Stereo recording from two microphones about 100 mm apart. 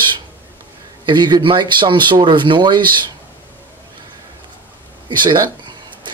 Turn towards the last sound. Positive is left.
turn(degrees=-45)  # may be behind; listen again after turning